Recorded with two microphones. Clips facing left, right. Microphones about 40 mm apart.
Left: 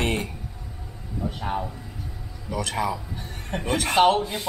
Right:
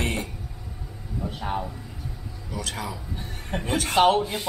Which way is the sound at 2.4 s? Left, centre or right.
Left.